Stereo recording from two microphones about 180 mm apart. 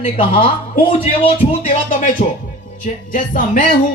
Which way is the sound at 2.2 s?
40° left (ahead or behind).